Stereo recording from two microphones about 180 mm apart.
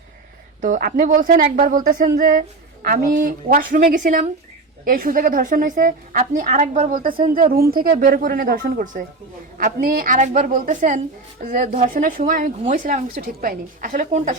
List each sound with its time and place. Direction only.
0.6 s a woman's voice: 50° right (ahead or behind)